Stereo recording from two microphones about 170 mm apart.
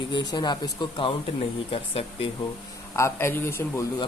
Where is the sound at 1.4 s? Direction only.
35° left (ahead or behind).